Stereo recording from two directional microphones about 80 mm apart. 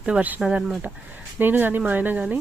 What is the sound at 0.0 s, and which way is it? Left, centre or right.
Speech, centre.